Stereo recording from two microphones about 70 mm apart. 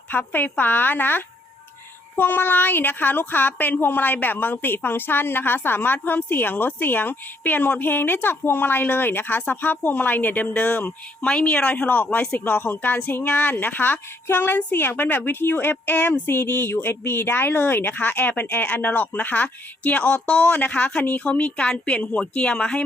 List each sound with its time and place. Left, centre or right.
0.1 s a woman's voice: left